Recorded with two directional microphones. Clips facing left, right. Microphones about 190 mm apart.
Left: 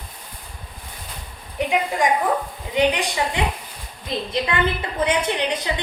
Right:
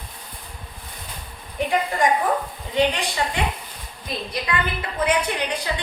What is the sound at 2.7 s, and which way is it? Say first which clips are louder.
A woman's voice: left 2 dB; 15° left (ahead or behind).